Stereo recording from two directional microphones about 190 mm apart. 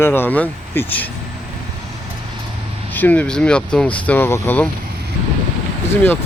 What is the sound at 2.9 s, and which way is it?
Speech, 10° left (ahead or behind).